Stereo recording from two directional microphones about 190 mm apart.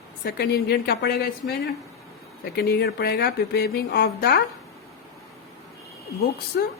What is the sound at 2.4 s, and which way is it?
Speech, 55° left (ahead or behind).